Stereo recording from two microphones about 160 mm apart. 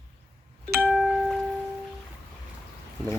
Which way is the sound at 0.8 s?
Centre (ahead or behind).